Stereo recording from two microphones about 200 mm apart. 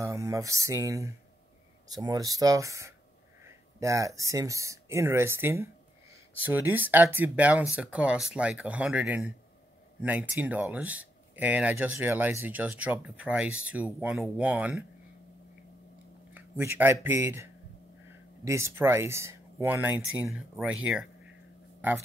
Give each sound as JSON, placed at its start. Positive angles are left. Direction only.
{"t": 0.0, "sound": "speech", "side_deg": -15}
{"t": 16.3, "sound": "speech", "side_deg": -10}